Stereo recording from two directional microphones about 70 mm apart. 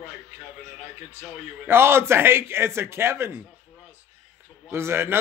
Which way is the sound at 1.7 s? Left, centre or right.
Right.